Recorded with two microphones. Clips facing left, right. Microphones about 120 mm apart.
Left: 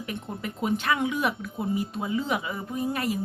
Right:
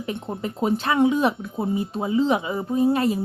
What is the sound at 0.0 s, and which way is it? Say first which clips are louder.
Speech: right 5 dB; 30° right (ahead or behind).